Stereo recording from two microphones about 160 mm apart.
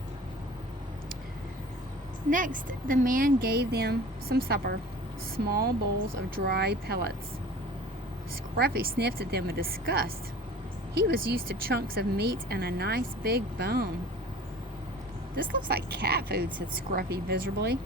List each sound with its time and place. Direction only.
2.3 s speech: 55° right (ahead or behind); by 5.7 s 75° right (ahead or behind)
6.3 s a woman's voice: 90° right
8.5 s speech: 80° right
10.9 s a woman's voice: 90° right
15.4 s a woman's voice: 75° right (ahead or behind)